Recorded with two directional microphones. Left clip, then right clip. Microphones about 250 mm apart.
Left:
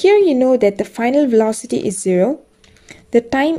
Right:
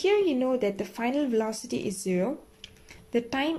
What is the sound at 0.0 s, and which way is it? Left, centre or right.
Speech, left.